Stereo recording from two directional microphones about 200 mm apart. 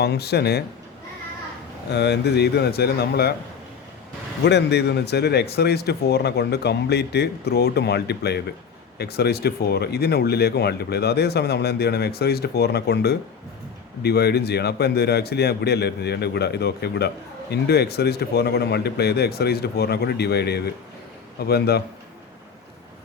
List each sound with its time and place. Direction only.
0.0 s speech: 55° left (ahead or behind)
1.9 s speech: 55° left (ahead or behind)
4.4 s speech: 55° left (ahead or behind)